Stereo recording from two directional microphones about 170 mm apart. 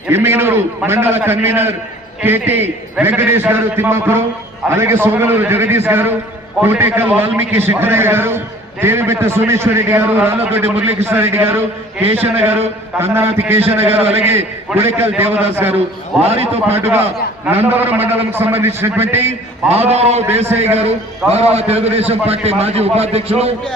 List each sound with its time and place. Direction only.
0.1 s a man's voice: 15° right (ahead or behind)
13.8 s a man's voice: 35° right (ahead or behind)
14.7 s a man's voice: 15° right (ahead or behind)
16.2 s a man's voice: 35° right (ahead or behind)
17.4 s a man's voice: 10° right (ahead or behind)
19.6 s a man's voice: 40° right (ahead or behind)